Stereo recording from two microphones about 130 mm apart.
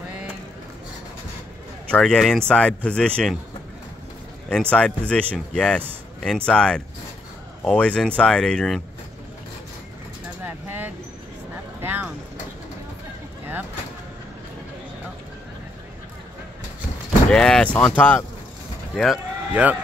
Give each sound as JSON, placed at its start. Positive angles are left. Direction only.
{"t": 1.9, "sound": "speech", "side_deg": 5}
{"t": 4.5, "sound": "speech", "side_deg": 10}
{"t": 10.4, "sound": "a sound", "side_deg": -15}
{"t": 11.8, "sound": "vehicle", "side_deg": -15}
{"t": 17.3, "sound": "speech", "side_deg": 5}
{"t": 19.5, "sound": "speech", "side_deg": -10}